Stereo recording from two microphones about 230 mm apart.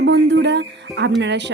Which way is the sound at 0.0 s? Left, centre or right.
Right.